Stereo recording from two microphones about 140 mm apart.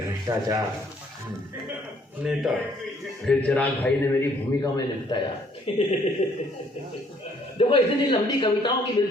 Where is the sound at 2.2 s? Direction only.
5° right (ahead or behind).